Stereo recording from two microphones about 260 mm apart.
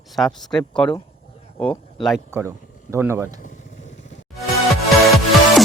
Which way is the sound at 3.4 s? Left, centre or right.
Left.